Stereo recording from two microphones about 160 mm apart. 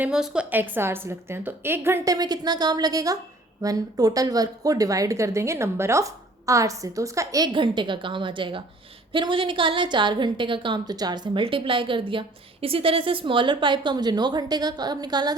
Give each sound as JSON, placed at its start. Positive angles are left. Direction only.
{"t": 0.0, "sound": "a woman's voice", "side_deg": -5}